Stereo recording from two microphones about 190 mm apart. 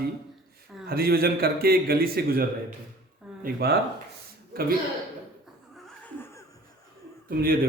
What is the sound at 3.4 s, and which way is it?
Speech, 55° right (ahead or behind).